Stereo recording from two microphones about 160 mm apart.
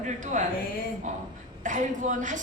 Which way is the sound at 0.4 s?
50° right (ahead or behind).